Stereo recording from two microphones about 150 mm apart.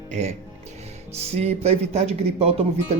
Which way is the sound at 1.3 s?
45° right (ahead or behind).